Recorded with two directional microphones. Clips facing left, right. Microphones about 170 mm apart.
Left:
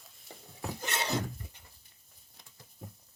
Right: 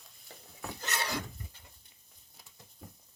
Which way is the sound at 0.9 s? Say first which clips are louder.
Left 3 dB; 25° left (ahead or behind).